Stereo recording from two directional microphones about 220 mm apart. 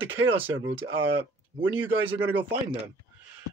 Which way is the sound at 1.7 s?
10° right (ahead or behind).